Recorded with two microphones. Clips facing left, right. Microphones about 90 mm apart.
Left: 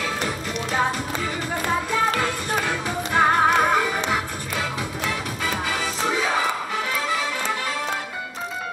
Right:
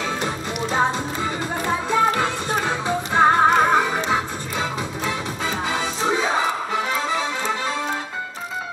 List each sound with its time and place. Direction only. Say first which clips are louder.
0.2 s music: right 2 dB; 25° right (ahead or behind)